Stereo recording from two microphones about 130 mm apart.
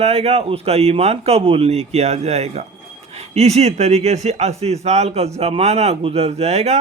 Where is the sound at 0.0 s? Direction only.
50° right (ahead or behind).